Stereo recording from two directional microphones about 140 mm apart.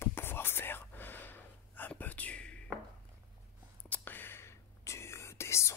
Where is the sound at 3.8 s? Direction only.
10° left (ahead or behind).